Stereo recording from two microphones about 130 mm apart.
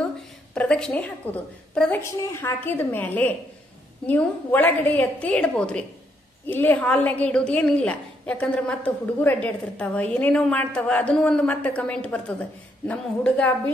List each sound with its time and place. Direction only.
0.6 s a woman's voice: 10° left (ahead or behind)